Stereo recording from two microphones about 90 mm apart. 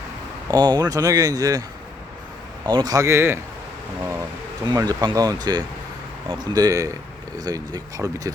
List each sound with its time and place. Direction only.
0.5 s speech: 50° right (ahead or behind)
2.6 s speech: 50° right (ahead or behind); by 3.4 s 30° right (ahead or behind)
4.6 s speech: 50° right (ahead or behind)